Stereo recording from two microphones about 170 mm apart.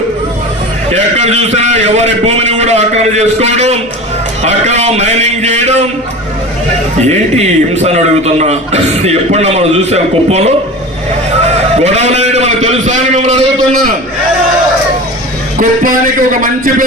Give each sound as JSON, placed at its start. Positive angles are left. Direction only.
{"t": 0.9, "sound": "a man's voice", "side_deg": -40}
{"t": 7.0, "sound": "a man's voice", "side_deg": -40}
{"t": 11.4, "sound": "a sound", "side_deg": -40}
{"t": 15.5, "sound": "a man's voice", "side_deg": -55}